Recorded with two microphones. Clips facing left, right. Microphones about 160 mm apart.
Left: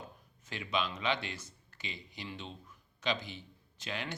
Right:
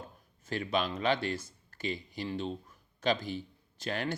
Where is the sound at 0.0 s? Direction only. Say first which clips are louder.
Right 2 dB; 45° right (ahead or behind).